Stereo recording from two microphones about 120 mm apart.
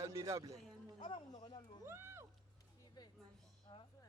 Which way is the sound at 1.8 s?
20° right (ahead or behind).